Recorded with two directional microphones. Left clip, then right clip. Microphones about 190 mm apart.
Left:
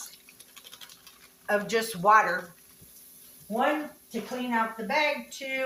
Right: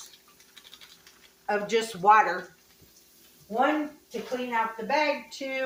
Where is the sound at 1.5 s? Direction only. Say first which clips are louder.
Even; 30° right (ahead or behind).